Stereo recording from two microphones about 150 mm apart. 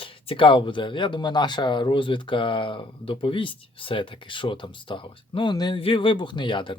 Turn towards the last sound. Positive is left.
turn(degrees=35)  # may be behind; listen again after turning